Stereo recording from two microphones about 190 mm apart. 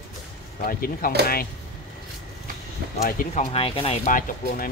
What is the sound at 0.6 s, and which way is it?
Speech, 50° left (ahead or behind).